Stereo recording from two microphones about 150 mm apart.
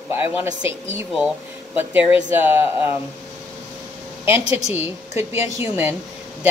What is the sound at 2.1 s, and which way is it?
Speech, 15° right (ahead or behind).